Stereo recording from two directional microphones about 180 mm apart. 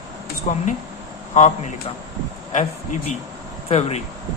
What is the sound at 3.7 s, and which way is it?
Speech, 35° left (ahead or behind).